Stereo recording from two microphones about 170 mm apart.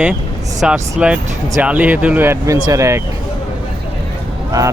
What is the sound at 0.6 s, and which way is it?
Speech, 5° right (ahead or behind).